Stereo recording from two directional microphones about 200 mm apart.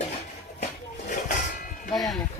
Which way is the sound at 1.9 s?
Centre (ahead or behind).